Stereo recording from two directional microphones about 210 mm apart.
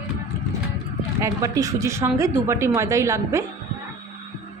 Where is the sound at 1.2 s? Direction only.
15° right (ahead or behind).